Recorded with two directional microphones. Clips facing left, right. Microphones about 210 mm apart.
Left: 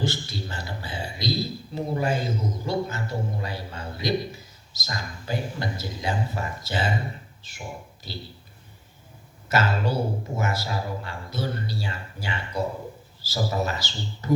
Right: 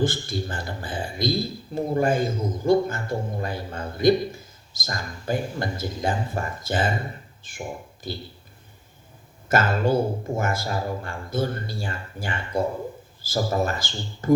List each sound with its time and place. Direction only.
0.0 s a man's voice: 50° right (ahead or behind)
9.5 s a man's voice: 50° right (ahead or behind)